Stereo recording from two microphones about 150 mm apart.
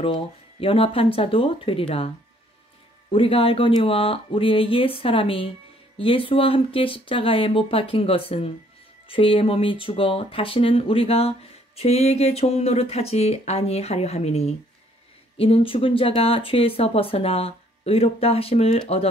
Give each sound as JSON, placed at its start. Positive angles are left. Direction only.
{"t": 0.0, "sound": "speech", "side_deg": 40}
{"t": 3.1, "sound": "speech", "side_deg": 40}